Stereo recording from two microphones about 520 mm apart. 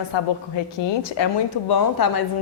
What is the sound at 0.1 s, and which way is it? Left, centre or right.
A woman's voice, left.